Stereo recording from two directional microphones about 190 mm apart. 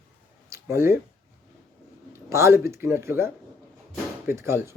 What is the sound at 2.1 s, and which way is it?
Speech, 15° right (ahead or behind).